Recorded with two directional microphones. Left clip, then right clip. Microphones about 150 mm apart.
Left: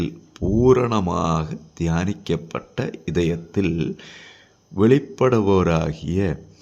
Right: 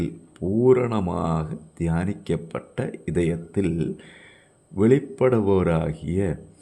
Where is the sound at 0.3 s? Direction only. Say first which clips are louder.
Left 2 dB; 15° left (ahead or behind).